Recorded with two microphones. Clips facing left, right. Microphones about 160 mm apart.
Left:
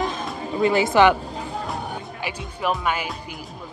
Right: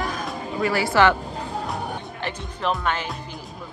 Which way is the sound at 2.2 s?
5° left (ahead or behind).